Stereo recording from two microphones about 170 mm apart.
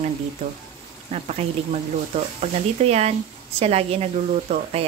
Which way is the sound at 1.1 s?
40° right (ahead or behind).